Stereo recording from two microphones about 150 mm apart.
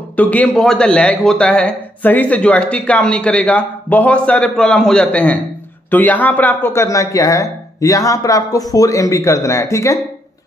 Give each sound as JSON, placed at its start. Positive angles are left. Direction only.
{"t": 0.1, "sound": "a man's voice", "side_deg": 10}